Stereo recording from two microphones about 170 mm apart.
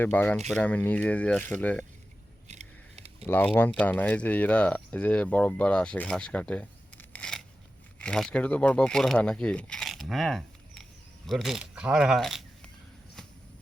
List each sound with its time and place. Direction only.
0.0 s speech: 10° left (ahead or behind)
2.5 s a sound: 40° right (ahead or behind)
3.2 s speech: 10° left (ahead or behind)